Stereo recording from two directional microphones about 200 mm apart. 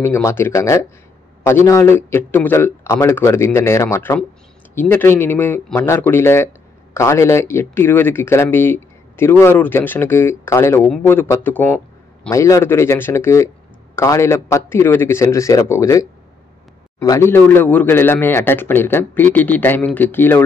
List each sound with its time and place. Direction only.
0.0 s a man's voice: 10° left (ahead or behind)